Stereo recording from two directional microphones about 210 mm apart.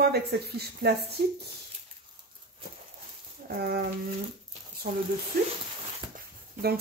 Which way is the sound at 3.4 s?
50° right (ahead or behind).